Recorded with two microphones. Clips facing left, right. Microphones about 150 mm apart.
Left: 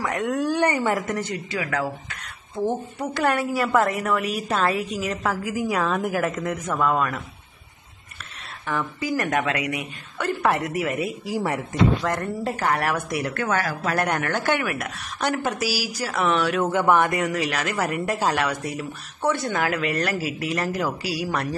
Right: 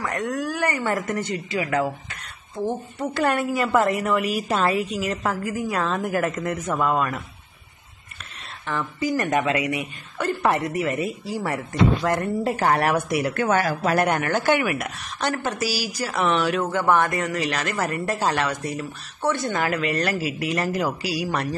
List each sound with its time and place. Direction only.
0.0 s a woman's voice: 15° left (ahead or behind)
1.8 s a sound: centre (ahead or behind)
3.2 s speech: centre (ahead or behind)
9.0 s speech: centre (ahead or behind)
12.0 s speech: 5° right (ahead or behind)
12.5 s a woman's voice: 25° right (ahead or behind)
12.9 s a woman's voice: 15° right (ahead or behind)
13.9 s speech: 5° right (ahead or behind)
15.1 s speech: 10° left (ahead or behind)
16.7 s speech: 15° left (ahead or behind)